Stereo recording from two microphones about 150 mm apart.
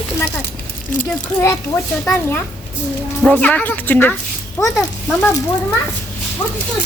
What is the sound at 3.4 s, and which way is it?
A child's voice, 10° left (ahead or behind).